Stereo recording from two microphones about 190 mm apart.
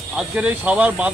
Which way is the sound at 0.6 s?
10° right (ahead or behind).